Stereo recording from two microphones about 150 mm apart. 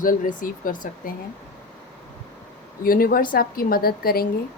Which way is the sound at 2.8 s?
75° left (ahead or behind).